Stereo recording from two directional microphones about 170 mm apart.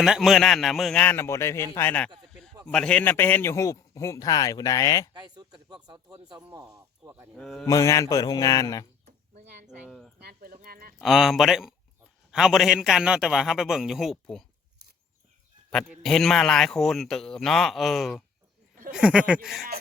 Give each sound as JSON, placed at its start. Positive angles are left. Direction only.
{"t": 0.0, "sound": "a man's voice", "side_deg": 0}
{"t": 5.1, "sound": "speech", "side_deg": -25}
{"t": 6.7, "sound": "speech", "side_deg": -10}
{"t": 7.3, "sound": "a man's voice", "side_deg": 5}
{"t": 7.7, "sound": "speech", "side_deg": 20}
{"t": 9.6, "sound": "a man's voice", "side_deg": 0}
{"t": 10.2, "sound": "speech", "side_deg": -65}
{"t": 11.0, "sound": "a man's voice", "side_deg": 0}
{"t": 15.7, "sound": "a man's voice", "side_deg": 0}